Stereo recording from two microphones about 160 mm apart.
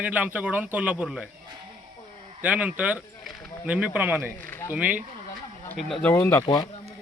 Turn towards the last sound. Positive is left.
turn(degrees=25)  # may be behind; listen again after turning